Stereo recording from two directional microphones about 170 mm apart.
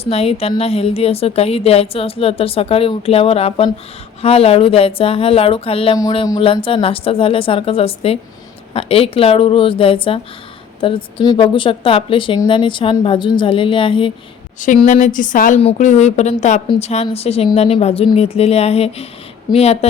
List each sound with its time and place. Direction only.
0.0 s a woman's voice: 35° left (ahead or behind)
6.0 s a woman's voice: 20° left (ahead or behind)
6.4 s a woman's voice: 30° left (ahead or behind)
14.8 s a woman's voice: 45° left (ahead or behind)